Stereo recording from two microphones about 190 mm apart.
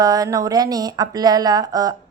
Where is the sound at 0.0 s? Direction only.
20° right (ahead or behind).